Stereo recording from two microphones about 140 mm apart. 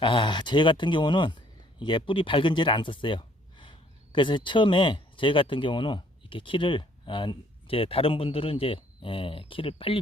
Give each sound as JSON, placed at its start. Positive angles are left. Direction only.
{"t": 0.0, "sound": "speech", "side_deg": 35}